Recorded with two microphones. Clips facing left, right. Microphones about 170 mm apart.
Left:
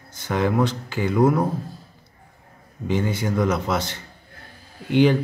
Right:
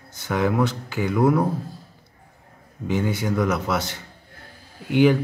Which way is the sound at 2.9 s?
Centre (ahead or behind).